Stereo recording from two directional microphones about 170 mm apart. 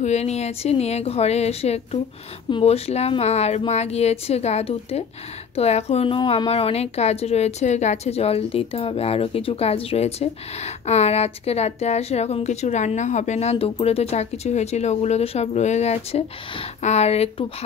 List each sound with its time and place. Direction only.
0.0 s a woman's voice: 40° left (ahead or behind)